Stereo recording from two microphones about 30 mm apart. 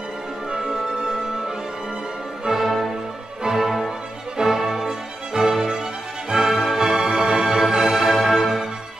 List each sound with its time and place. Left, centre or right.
0.5 s music: right
2.5 s music: centre